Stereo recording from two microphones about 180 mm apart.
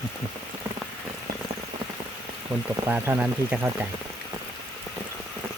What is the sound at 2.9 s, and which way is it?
Speech, 10° right (ahead or behind).